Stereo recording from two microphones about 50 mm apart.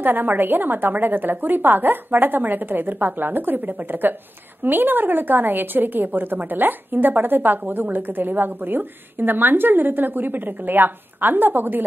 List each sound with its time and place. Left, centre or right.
0.0 s a woman's voice: right